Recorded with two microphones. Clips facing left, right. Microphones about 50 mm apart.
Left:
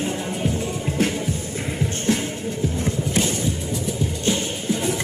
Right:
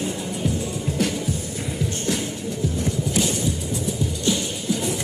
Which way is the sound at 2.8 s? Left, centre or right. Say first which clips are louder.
Even; left.